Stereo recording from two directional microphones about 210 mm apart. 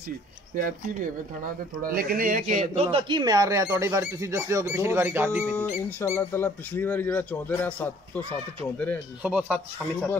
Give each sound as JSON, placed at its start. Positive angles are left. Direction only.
{"t": 1.8, "sound": "a man's voice", "side_deg": -45}
{"t": 5.9, "sound": "speech", "side_deg": 10}
{"t": 9.2, "sound": "a man's voice", "side_deg": -5}